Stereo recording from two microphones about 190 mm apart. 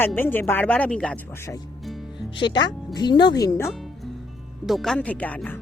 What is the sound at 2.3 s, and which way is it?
Speech, 25° left (ahead or behind).